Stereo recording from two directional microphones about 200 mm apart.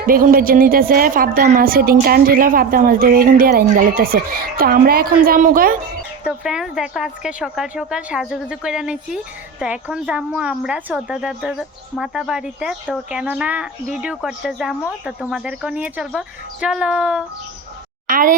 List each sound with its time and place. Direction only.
0.1 s a woman's voice: 45° right (ahead or behind)
6.2 s speech: 5° right (ahead or behind)
18.1 s a woman's voice: 40° right (ahead or behind)